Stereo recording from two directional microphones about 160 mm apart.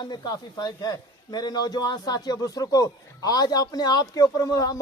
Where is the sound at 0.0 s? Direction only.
25° left (ahead or behind).